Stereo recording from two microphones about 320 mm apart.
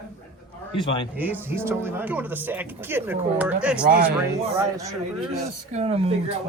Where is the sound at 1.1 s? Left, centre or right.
Centre.